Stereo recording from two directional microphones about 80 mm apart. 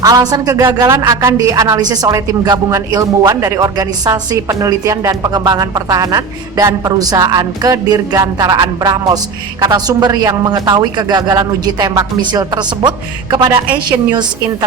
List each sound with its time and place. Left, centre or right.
0.0 s a woman's voice: right
12.2 s a woman's voice: right
13.3 s a woman's voice: right